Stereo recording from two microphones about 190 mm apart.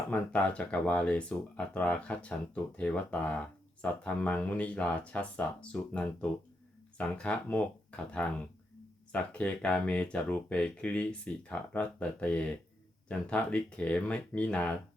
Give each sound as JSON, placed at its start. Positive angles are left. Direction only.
{"t": 0.1, "sound": "speech", "side_deg": 5}